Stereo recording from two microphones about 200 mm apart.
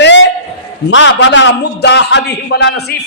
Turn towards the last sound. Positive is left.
turn(degrees=55)  # may be behind; listen again after turning